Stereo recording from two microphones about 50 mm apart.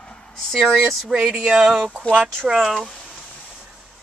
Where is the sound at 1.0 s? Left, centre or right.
Centre.